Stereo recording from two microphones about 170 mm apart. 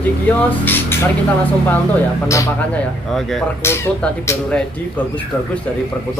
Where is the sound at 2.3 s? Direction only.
20° left (ahead or behind).